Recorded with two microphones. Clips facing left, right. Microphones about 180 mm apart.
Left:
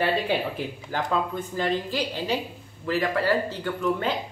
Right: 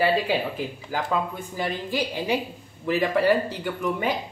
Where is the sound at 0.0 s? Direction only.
5° right (ahead or behind).